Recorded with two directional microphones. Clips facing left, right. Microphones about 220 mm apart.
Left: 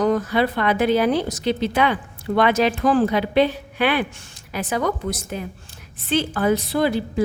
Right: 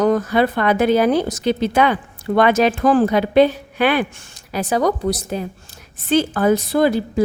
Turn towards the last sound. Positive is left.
turn(degrees=-45)  # may be behind; listen again after turning